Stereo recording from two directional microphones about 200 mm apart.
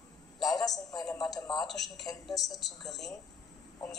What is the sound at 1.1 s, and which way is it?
Speech, 20° left (ahead or behind).